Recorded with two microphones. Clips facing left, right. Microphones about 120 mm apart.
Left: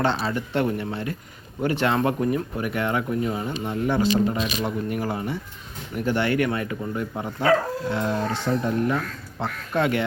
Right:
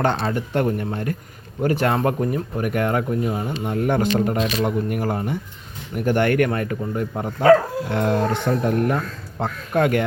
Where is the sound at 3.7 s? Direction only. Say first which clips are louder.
Right 2 dB; 50° right (ahead or behind).